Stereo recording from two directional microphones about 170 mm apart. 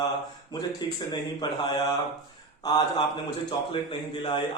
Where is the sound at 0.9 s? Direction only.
25° left (ahead or behind).